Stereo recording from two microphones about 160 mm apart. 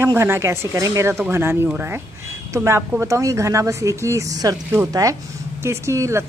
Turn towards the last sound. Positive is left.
turn(degrees=-20)  # may be behind; listen again after turning